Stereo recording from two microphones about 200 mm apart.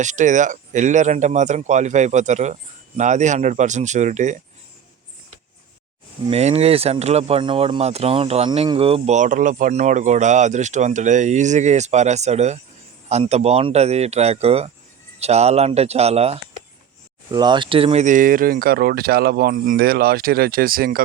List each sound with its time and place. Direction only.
0.0 s speech: 40° right (ahead or behind)
6.2 s speech: 30° right (ahead or behind); by 21.0 s 45° right (ahead or behind)